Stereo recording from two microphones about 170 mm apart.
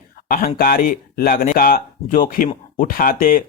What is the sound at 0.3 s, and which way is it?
Speech, 60° left (ahead or behind).